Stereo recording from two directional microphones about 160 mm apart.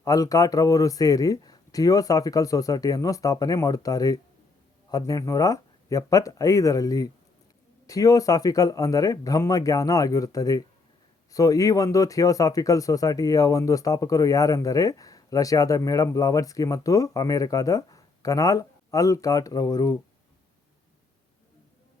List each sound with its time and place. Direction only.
0.0 s speech: 20° left (ahead or behind)